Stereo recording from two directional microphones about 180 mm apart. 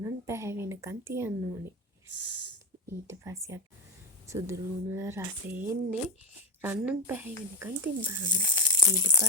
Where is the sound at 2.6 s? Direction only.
15° right (ahead or behind).